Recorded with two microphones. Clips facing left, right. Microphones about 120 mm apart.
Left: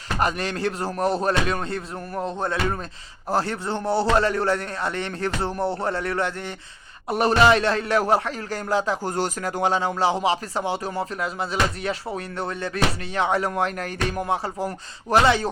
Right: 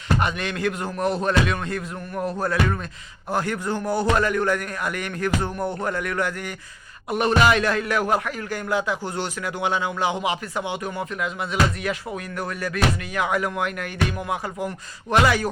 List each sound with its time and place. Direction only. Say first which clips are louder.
0.2 s a man's voice: left 1 dB; 35° left (ahead or behind)